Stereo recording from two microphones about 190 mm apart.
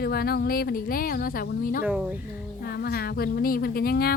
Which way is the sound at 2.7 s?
55° left (ahead or behind).